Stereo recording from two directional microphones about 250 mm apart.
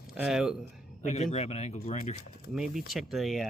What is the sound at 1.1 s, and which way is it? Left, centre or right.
Speech, left.